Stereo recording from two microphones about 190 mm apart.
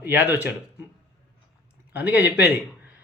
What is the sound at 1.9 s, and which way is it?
Speech, 10° right (ahead or behind).